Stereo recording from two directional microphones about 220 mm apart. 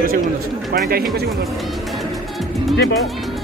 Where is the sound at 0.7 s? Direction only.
45° right (ahead or behind).